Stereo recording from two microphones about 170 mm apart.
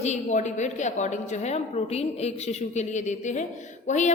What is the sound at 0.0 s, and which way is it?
A woman's voice, 45° left (ahead or behind).